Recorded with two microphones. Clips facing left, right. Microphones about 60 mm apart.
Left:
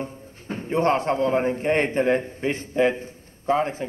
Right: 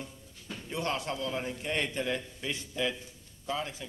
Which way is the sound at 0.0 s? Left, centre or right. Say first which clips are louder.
Left 11 dB; left.